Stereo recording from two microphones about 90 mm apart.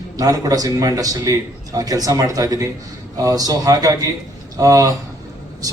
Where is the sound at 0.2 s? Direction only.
45° right (ahead or behind).